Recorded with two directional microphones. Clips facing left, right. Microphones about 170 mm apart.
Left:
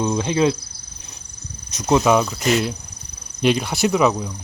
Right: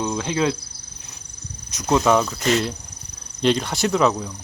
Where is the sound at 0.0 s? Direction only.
15° left (ahead or behind).